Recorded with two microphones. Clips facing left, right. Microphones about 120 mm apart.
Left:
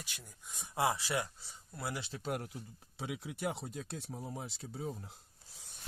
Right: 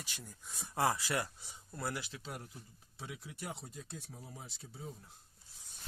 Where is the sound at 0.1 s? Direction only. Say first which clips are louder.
Right 3 dB; centre (ahead or behind).